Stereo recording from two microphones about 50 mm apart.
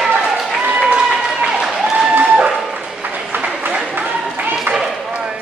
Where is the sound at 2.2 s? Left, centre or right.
Right.